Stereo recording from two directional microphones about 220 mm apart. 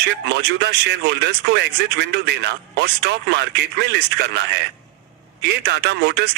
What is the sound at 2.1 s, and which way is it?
A man's voice, 50° right (ahead or behind).